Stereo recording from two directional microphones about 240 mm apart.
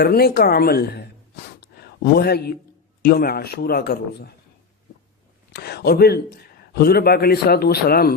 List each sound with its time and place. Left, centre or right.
0.0 s a man's voice: left
1.6 s a sound: left
3.0 s a man's voice: left
5.5 s a man's voice: left